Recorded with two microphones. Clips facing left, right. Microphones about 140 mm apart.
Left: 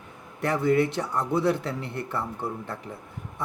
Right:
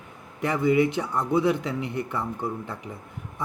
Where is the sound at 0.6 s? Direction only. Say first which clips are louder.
Right 2 dB; 10° right (ahead or behind).